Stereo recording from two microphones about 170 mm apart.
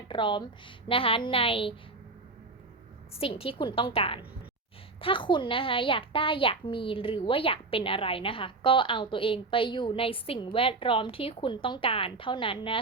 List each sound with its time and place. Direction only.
0.1 s a woman's voice: 30° left (ahead or behind)
3.2 s a woman's voice: 35° left (ahead or behind)